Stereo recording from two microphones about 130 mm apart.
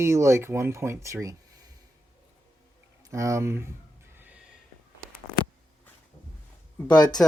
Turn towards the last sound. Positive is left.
turn(degrees=30)  # may be behind; listen again after turning